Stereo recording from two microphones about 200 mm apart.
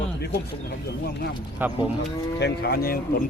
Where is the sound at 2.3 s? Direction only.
55° left (ahead or behind).